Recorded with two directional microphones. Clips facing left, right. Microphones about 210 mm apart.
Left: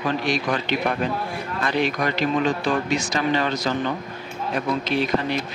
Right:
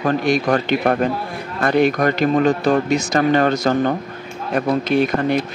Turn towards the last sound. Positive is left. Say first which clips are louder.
# right 5 dB
turn(degrees=-50)  # may be behind; listen again after turning